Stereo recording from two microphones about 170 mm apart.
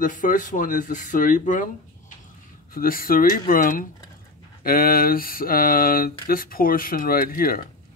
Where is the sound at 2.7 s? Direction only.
55° left (ahead or behind).